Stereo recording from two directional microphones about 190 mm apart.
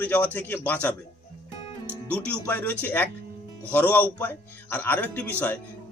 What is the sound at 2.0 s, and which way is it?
Speech, 5° left (ahead or behind).